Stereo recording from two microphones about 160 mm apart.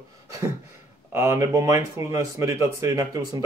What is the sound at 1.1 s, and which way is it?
Speech, 15° right (ahead or behind).